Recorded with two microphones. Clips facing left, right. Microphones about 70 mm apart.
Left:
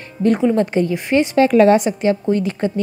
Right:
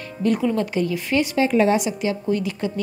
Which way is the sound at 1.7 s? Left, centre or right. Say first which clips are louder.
Left 6 dB; left.